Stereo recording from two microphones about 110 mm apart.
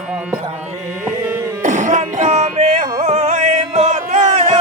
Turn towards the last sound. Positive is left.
turn(degrees=-90)